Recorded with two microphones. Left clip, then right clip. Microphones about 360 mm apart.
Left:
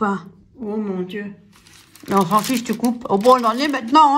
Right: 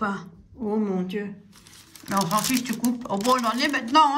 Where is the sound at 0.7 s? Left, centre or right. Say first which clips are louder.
Left 1 dB; centre.